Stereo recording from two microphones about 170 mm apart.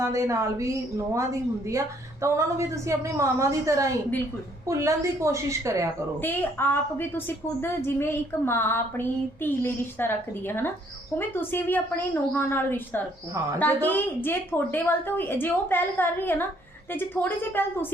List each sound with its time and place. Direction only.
0.0 s a woman's voice: 15° right (ahead or behind)
6.1 s a woman's voice: 10° left (ahead or behind)